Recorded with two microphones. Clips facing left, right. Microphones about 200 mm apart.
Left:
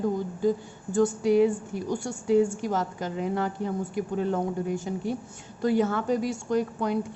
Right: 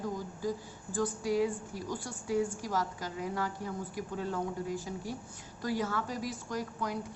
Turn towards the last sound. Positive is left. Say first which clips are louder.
# left 10 dB
turn(degrees=25)  # may be behind; listen again after turning